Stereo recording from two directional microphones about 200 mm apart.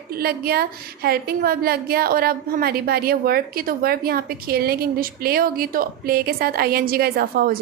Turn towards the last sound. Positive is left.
turn(degrees=-50)  # may be behind; listen again after turning